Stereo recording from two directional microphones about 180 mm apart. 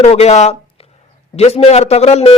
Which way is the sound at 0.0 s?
35° left (ahead or behind).